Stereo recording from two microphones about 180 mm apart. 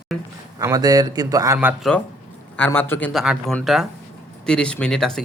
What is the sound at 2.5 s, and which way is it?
Speech, 10° left (ahead or behind).